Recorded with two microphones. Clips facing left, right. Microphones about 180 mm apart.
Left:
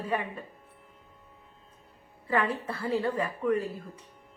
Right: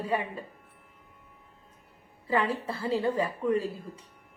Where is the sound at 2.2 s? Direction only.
25° right (ahead or behind).